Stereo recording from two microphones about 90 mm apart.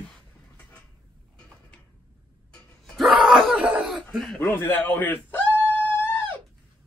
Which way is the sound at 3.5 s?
15° right (ahead or behind).